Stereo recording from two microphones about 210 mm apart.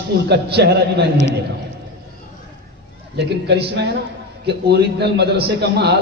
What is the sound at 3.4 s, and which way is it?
A man's voice, 50° right (ahead or behind).